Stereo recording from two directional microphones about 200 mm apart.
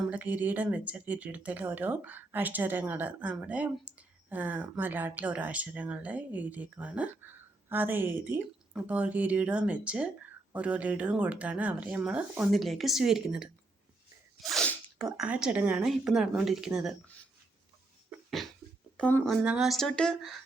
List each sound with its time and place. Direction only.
0.1 s speech: 10° right (ahead or behind)
14.4 s sneeze: 5° left (ahead or behind)
15.2 s a woman's voice: 5° right (ahead or behind)
18.3 s a sound: centre (ahead or behind)
18.9 s a woman's voice: 5° left (ahead or behind)